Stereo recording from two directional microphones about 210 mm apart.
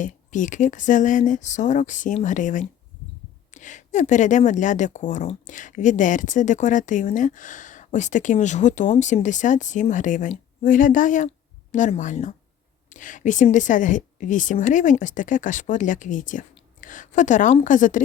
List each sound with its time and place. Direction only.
0.0 s a woman's voice: 35° left (ahead or behind)